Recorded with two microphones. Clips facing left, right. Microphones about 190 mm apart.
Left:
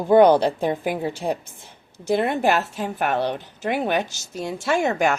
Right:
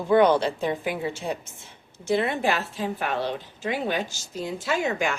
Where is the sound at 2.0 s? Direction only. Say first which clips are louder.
Left 3 dB; 50° left (ahead or behind).